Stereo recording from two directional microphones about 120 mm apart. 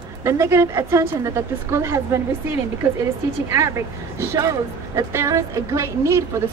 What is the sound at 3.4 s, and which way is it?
Speech, 25° right (ahead or behind).